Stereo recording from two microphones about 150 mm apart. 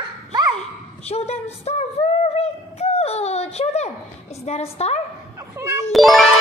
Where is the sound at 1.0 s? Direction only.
45° left (ahead or behind).